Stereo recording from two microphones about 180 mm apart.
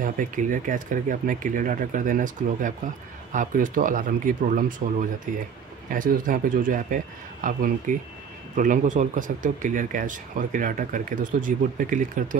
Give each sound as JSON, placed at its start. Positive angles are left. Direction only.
{"t": 0.0, "sound": "speech", "side_deg": -45}
{"t": 5.9, "sound": "speech", "side_deg": -50}